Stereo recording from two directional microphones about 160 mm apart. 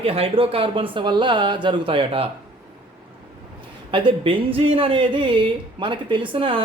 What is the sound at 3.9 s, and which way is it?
Speech, 30° right (ahead or behind).